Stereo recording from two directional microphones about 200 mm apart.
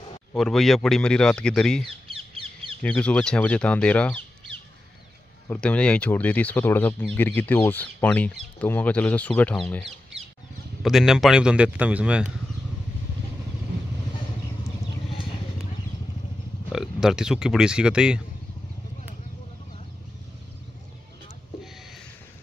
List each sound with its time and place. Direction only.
0.4 s a man's voice: centre (ahead or behind)
2.0 s bird: 25° right (ahead or behind)
2.8 s speech: 5° left (ahead or behind)
5.5 s a man's voice: 5° left (ahead or behind)
16.7 s a man's voice: centre (ahead or behind)